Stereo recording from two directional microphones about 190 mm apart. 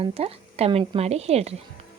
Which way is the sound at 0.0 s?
30° right (ahead or behind).